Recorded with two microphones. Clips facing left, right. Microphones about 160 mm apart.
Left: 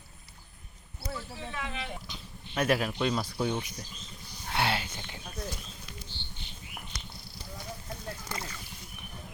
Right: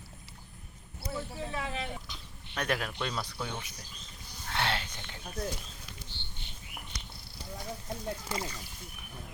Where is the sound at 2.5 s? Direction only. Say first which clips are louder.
Left 5 dB; 5° left (ahead or behind).